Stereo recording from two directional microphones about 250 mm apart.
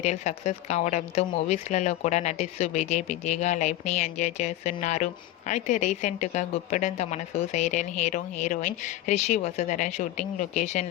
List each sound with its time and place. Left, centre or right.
0.0 s a woman's voice: left